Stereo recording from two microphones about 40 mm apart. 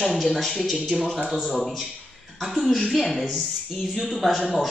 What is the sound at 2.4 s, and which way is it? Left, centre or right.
Speech, centre.